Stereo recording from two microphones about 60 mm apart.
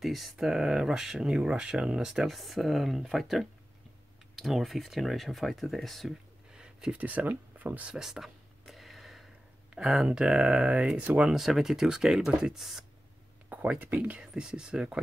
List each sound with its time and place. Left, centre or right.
0.0 s speech: centre
2.2 s speech: centre
6.5 s a sound: centre
7.0 s speech: right
7.9 s speech: centre
8.6 s a sound: centre
9.7 s speech: centre
11.3 s speech: centre
13.5 s speech: right
14.2 s speech: centre